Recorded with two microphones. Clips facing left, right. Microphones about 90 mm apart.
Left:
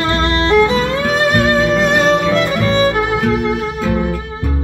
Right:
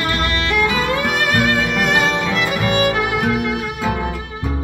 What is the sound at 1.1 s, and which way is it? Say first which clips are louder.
Music: left 7 dB; 30° left (ahead or behind).